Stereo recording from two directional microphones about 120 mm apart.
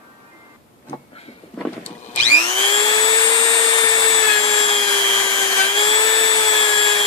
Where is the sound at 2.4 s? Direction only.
30° left (ahead or behind).